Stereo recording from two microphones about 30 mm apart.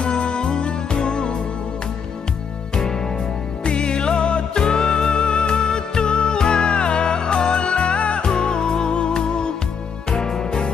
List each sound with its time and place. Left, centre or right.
0.0 s music: left
3.6 s music: left
10.1 s music: left